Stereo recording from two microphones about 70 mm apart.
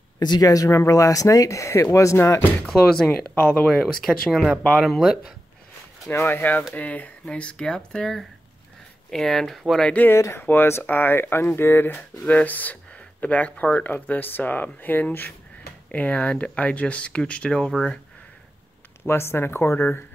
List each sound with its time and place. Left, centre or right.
0.2 s speech: left
2.6 s speech: centre
3.3 s speech: left
3.9 s speech: centre
6.0 s speech: left; by 9.8 s centre
9.8 s speech: left
10.1 s speech: left
10.4 s speech: left; by 17.9 s centre
19.0 s speech: left